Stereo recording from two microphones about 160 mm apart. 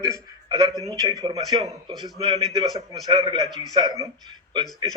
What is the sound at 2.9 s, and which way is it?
Speech, 25° right (ahead or behind).